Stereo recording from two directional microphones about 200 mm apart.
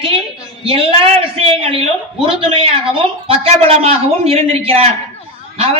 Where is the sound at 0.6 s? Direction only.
25° right (ahead or behind).